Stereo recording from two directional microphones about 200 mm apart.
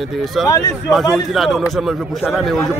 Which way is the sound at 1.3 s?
Centre (ahead or behind).